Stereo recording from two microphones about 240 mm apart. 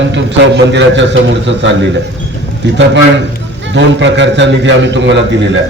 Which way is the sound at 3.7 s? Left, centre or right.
Right.